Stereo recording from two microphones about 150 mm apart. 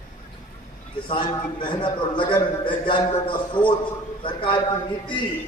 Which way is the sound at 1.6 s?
30° left (ahead or behind).